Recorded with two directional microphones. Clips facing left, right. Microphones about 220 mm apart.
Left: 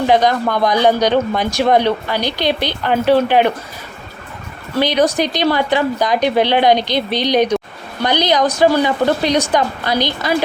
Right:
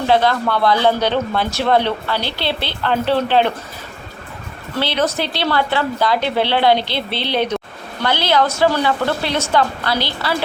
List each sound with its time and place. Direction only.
0.1 s speech: 15° left (ahead or behind)
4.8 s speech: 15° left (ahead or behind)